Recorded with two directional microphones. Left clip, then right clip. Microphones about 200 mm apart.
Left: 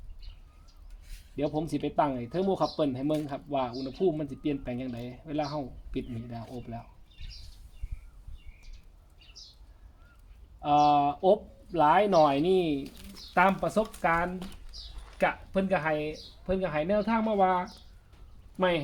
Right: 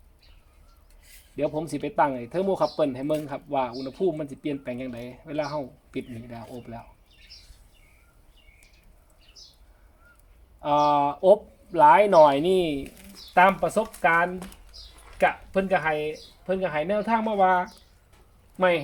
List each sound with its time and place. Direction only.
1.4 s speech: 25° right (ahead or behind)
10.6 s speech: 30° right (ahead or behind)